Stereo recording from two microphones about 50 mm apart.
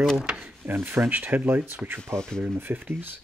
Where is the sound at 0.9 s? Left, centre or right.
Right.